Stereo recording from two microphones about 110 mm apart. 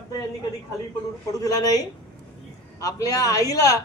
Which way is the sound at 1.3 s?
35° left (ahead or behind).